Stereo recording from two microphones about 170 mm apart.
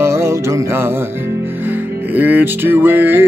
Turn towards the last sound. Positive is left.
turn(degrees=-10)  # may be behind; listen again after turning